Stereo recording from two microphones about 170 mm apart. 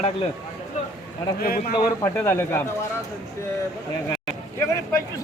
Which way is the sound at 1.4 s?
60° left (ahead or behind).